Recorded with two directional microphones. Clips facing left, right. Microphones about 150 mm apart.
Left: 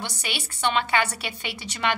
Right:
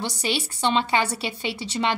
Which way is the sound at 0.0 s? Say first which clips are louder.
Right 6 dB; 35° right (ahead or behind).